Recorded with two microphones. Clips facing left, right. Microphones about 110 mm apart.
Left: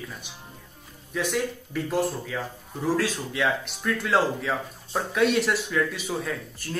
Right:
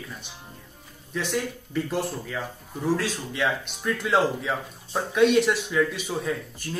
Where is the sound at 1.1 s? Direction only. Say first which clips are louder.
Left 1 dB; centre (ahead or behind).